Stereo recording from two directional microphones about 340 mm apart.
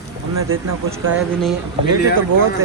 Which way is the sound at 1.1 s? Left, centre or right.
Centre.